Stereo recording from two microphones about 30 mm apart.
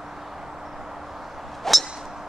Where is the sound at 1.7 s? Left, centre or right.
Centre.